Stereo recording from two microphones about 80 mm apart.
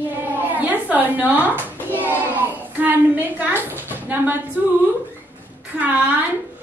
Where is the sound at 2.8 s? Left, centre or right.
Right.